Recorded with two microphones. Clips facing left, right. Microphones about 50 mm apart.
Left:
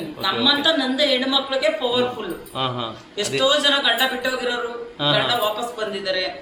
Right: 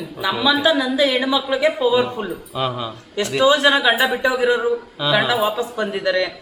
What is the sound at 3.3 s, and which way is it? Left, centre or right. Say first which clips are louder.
A man's voice: right 4 dB; right.